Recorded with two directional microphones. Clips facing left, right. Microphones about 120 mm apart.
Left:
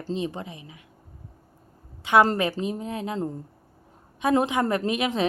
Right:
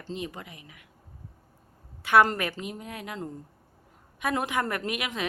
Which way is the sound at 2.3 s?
25° left (ahead or behind).